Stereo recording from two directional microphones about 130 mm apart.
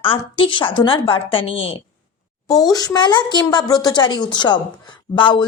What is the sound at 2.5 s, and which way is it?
A woman's voice, 30° left (ahead or behind).